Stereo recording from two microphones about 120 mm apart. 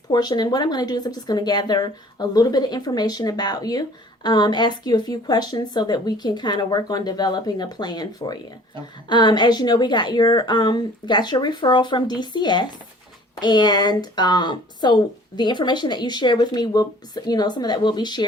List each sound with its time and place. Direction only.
0.1 s speech: 35° left (ahead or behind)